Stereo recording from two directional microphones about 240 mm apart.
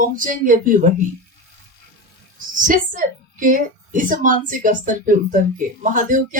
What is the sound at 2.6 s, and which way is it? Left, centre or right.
A woman's voice, right.